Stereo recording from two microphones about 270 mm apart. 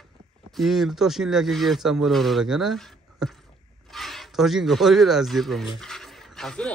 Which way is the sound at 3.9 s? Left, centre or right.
Centre.